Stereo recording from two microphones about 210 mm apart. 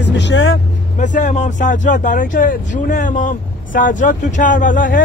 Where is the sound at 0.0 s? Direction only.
60° left (ahead or behind).